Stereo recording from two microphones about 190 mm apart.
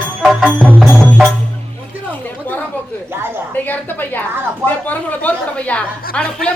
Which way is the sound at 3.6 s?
10° left (ahead or behind).